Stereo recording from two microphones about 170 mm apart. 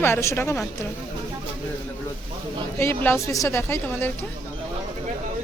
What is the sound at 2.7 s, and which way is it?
A woman's voice, 15° left (ahead or behind).